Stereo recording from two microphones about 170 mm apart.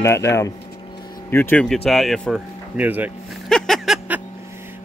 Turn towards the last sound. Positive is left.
turn(degrees=0)  # may be behind; listen again after turning